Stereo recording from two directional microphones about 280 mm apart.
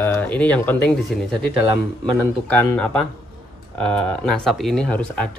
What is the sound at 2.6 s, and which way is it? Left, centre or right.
Speech, centre.